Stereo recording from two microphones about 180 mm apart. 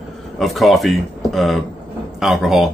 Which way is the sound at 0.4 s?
Centre (ahead or behind).